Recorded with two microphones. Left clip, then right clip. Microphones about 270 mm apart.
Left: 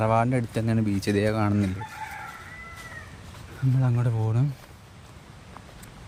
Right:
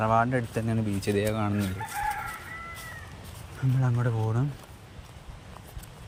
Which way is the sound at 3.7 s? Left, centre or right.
Left.